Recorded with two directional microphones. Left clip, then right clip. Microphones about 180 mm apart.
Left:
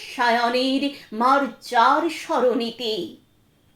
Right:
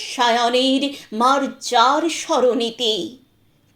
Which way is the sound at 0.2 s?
25° right (ahead or behind).